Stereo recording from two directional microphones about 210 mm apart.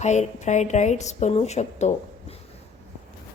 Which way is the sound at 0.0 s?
35° left (ahead or behind).